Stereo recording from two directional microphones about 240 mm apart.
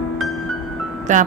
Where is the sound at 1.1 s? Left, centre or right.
Right.